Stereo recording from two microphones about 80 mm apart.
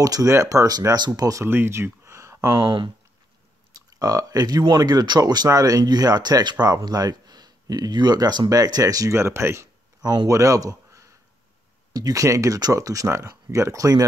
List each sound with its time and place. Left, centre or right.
0.0 s speech: right
0.7 s speech: right
1.4 s speech: right
2.6 s speech: right
3.7 s speech: right
10.0 s speech: right